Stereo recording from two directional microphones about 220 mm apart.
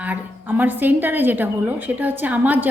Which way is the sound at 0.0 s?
5° right (ahead or behind).